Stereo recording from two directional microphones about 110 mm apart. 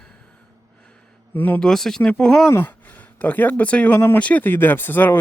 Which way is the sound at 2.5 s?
20° left (ahead or behind).